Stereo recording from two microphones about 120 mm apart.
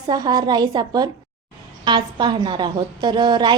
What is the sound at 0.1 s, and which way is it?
A woman's voice, 35° right (ahead or behind).